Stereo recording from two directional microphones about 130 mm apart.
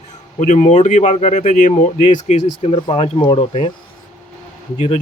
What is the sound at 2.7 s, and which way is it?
Speech, 45° left (ahead or behind).